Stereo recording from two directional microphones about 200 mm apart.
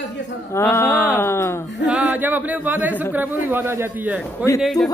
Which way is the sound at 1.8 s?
5° right (ahead or behind).